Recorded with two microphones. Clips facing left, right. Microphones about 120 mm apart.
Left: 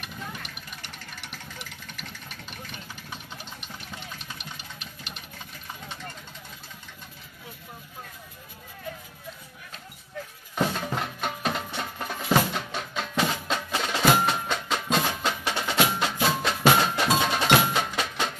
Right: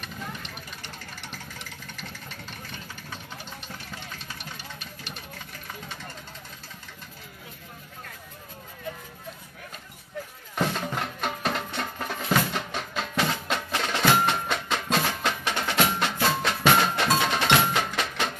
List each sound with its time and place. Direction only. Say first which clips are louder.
4.4 s vehicle: right 1 dB; 20° left (ahead or behind)
10.5 s music: left 1 dB; centre (ahead or behind)
15.2 s percussion: even; 5° left (ahead or behind)